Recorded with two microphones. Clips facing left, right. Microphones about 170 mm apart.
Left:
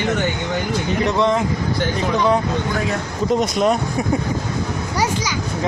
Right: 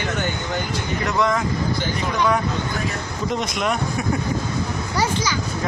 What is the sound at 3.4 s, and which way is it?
Speech, 35° left (ahead or behind).